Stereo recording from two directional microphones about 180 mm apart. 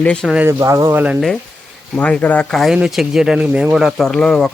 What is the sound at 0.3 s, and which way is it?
Speech, 15° right (ahead or behind).